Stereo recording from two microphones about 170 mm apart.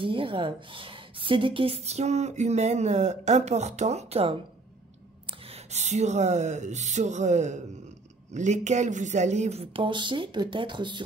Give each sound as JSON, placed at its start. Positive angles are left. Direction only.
{"t": 0.0, "sound": "a woman's voice", "side_deg": -30}
{"t": 5.5, "sound": "a woman's voice", "side_deg": -40}